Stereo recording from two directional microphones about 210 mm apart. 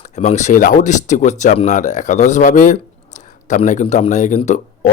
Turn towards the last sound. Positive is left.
turn(degrees=35)  # may be behind; listen again after turning